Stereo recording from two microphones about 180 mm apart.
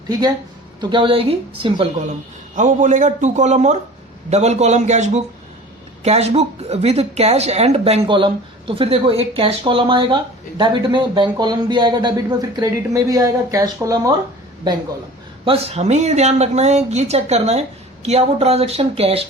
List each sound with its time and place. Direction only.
0.8 s speech: 25° right (ahead or behind)
2.6 s speech: 45° right (ahead or behind); by 14.1 s 20° right (ahead or behind)
15.4 s speech: 35° right (ahead or behind)